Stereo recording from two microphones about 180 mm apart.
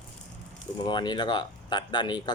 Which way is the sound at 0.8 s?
25° left (ahead or behind).